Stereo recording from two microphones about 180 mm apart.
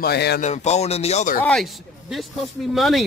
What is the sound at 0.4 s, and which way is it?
Speech, 40° left (ahead or behind).